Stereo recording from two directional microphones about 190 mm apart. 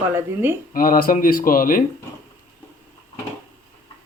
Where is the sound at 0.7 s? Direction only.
50° left (ahead or behind).